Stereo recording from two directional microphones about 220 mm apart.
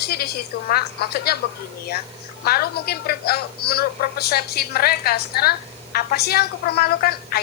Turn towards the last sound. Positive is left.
turn(degrees=45)  # may be behind; listen again after turning